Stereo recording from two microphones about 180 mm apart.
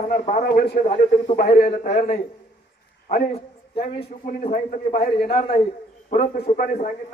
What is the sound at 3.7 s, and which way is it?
A man's voice, 30° left (ahead or behind).